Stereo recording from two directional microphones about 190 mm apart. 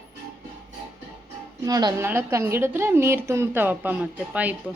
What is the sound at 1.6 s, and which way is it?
A woman's voice, 20° right (ahead or behind).